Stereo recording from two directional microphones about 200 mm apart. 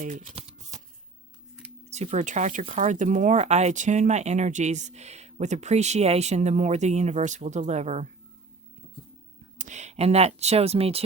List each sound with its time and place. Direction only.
0.0 s shuffling cards: 35° right (ahead or behind)
1.9 s speech: 35° right (ahead or behind)
9.6 s speech: 35° right (ahead or behind)